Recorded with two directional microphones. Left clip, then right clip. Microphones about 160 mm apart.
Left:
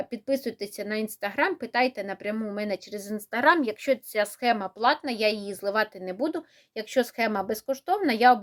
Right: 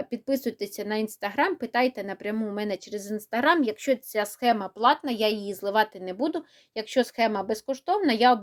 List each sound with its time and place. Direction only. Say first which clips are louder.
0.0 s speech: even; 25° right (ahead or behind)